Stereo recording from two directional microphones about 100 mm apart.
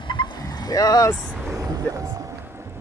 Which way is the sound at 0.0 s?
50° left (ahead or behind).